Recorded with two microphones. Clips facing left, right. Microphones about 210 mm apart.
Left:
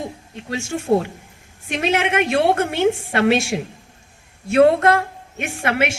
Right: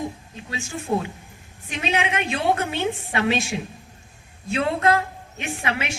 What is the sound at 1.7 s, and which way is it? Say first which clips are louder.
A woman's voice: left 5 dB; 70° left (ahead or behind).